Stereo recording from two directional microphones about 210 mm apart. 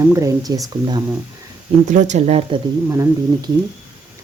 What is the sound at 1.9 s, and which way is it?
Speech, 35° right (ahead or behind).